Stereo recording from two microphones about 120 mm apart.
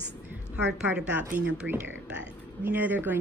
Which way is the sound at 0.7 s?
10° right (ahead or behind).